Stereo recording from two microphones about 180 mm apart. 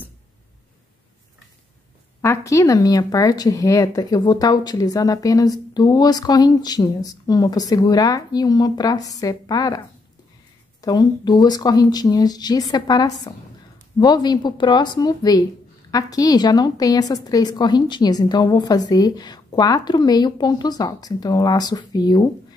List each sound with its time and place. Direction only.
2.2 s speech: 15° left (ahead or behind)
10.8 s speech: 20° left (ahead or behind)